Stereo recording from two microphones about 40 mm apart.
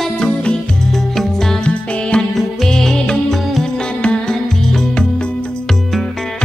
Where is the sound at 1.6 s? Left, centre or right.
Left.